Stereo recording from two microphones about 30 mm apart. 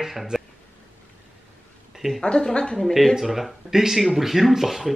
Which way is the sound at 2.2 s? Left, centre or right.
Left.